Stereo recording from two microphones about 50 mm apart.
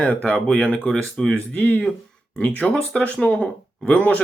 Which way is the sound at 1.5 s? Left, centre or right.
Left.